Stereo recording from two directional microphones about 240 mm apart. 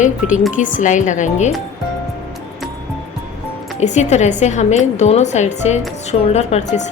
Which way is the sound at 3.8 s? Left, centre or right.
Left.